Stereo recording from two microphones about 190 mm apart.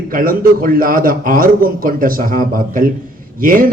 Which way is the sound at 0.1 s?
50° right (ahead or behind).